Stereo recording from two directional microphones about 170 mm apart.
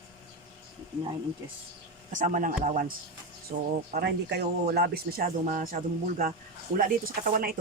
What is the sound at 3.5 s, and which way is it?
Speech, 40° right (ahead or behind).